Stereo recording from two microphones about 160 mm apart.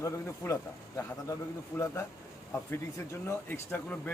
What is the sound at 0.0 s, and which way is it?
A man's voice, 20° left (ahead or behind).